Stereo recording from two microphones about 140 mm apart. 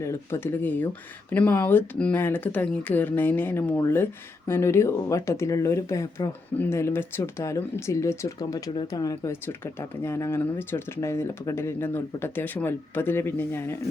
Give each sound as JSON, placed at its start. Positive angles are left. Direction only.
{"t": 0.0, "sound": "speech", "side_deg": 20}